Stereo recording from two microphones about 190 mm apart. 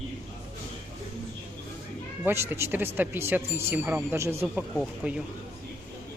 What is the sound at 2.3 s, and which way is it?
Speech, 10° right (ahead or behind).